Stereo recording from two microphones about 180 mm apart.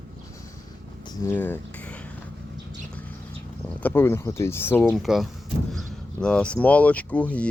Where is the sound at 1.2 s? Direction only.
10° left (ahead or behind).